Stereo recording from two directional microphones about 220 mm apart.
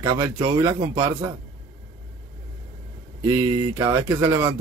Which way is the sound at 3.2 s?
15° right (ahead or behind).